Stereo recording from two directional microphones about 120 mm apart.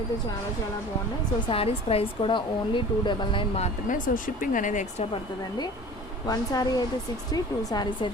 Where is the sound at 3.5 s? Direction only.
75° left (ahead or behind).